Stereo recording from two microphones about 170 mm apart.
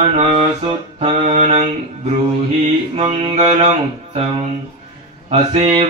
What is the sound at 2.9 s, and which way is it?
Mantra, 35° right (ahead or behind).